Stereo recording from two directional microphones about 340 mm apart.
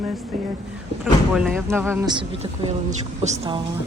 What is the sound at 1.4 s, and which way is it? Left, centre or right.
Speech, centre.